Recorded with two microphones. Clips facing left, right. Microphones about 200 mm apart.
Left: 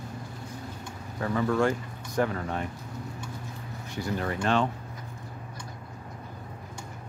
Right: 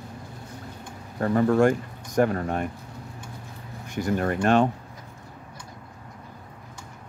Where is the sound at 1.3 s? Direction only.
40° right (ahead or behind).